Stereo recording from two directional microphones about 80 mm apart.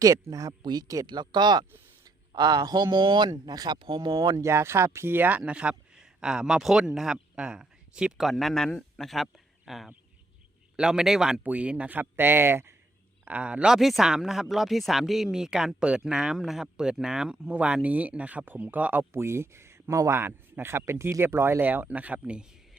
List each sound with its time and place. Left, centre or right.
0.0 s speech: right
0.6 s speech: right
1.0 s speech: right
3.8 s speech: right
4.4 s a man's voice: right
5.4 s speech: centre
8.3 s speech: centre; by 12.7 s right
13.2 s speech: centre
19.1 s a man's voice: right; by 22.8 s centre